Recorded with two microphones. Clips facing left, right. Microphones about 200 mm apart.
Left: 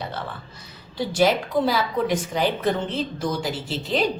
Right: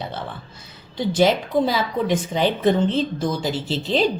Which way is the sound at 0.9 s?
20° right (ahead or behind).